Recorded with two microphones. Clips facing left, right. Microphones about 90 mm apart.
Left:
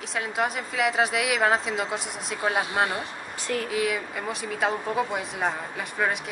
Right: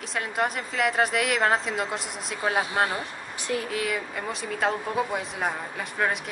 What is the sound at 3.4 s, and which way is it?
Speech, 15° right (ahead or behind).